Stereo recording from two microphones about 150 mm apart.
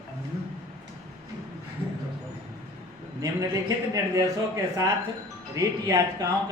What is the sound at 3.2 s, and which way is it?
A man's voice, 20° right (ahead or behind).